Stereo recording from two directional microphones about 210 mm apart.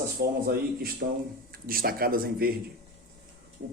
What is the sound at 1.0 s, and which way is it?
Speech, 45° right (ahead or behind).